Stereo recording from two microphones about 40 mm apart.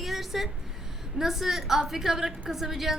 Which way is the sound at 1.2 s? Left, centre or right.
Centre.